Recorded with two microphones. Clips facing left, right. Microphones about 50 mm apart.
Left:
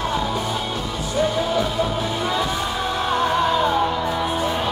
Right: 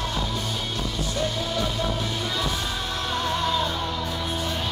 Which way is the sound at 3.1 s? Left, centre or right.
Left.